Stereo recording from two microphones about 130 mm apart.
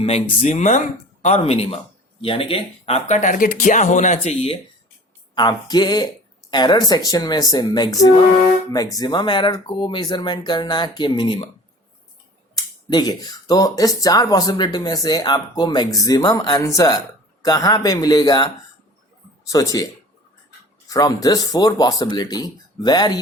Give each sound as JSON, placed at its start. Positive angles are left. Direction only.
{"t": 0.0, "sound": "speech", "side_deg": 55}
{"t": 3.2, "sound": "speech", "side_deg": 85}
{"t": 5.3, "sound": "speech", "side_deg": 30}
{"t": 12.5, "sound": "speech", "side_deg": 30}